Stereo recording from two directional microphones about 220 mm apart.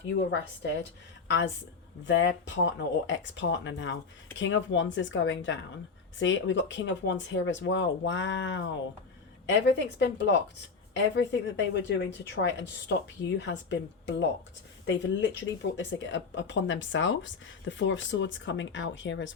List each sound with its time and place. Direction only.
0.2 s speech: 55° left (ahead or behind)
2.0 s speech: 55° left (ahead or behind)